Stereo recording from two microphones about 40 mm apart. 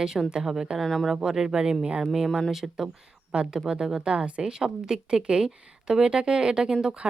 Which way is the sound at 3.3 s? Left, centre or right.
Right.